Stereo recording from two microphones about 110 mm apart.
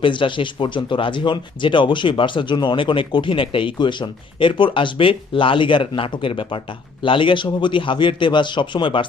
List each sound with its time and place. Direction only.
0.0 s speech: 50° left (ahead or behind)